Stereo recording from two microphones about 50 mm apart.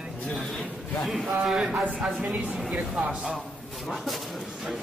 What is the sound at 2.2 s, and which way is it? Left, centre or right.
Speech, right.